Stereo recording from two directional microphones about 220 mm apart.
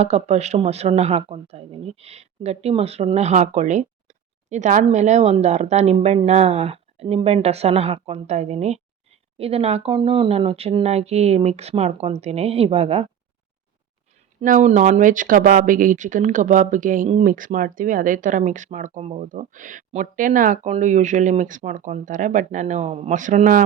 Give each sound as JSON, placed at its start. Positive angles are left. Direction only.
{"t": 0.0, "sound": "speech", "side_deg": -30}
{"t": 14.4, "sound": "speech", "side_deg": -35}